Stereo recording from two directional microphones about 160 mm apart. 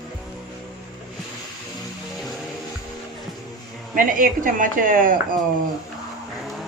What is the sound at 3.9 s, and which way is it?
Speech, 60° right (ahead or behind).